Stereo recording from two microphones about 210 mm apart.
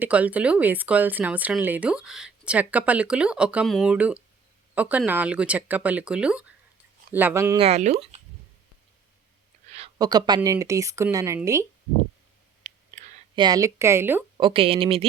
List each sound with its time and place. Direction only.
0.0 s speech: 5° right (ahead or behind)
7.6 s speech: 30° right (ahead or behind)
10.0 s speech: 20° right (ahead or behind)
12.7 s clicking: 35° right (ahead or behind)
13.3 s speech: 20° right (ahead or behind)
14.3 s speech: 25° right (ahead or behind)